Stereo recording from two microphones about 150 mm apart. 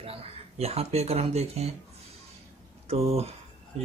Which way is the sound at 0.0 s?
40° right (ahead or behind).